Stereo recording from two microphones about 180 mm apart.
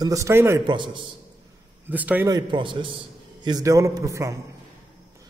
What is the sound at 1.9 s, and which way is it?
Speech, 10° right (ahead or behind).